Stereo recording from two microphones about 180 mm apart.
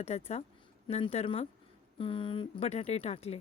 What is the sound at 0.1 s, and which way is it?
Speech, 35° left (ahead or behind).